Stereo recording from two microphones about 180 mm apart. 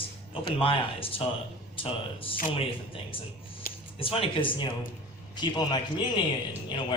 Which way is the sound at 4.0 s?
30° left (ahead or behind).